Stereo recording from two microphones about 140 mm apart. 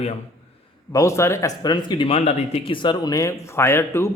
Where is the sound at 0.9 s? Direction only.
20° left (ahead or behind).